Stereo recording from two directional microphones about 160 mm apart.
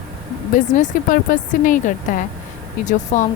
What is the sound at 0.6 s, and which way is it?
Speech, 50° left (ahead or behind).